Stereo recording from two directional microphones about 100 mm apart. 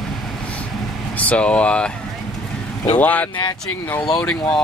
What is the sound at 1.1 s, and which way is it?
Speech, 15° left (ahead or behind).